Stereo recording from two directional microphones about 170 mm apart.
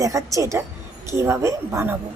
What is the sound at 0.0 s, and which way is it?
Speech, 20° right (ahead or behind).